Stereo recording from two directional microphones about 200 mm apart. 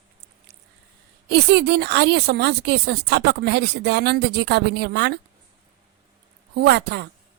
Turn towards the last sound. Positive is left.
turn(degrees=-55)  # may be behind; listen again after turning